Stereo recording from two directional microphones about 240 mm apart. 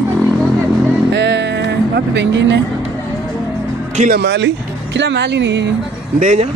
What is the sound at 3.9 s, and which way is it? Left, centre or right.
Speech, right.